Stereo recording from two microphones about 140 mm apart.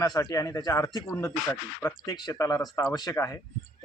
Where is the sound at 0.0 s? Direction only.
25° left (ahead or behind).